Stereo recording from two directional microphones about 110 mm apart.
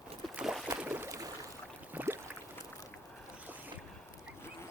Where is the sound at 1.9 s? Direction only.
15° right (ahead or behind).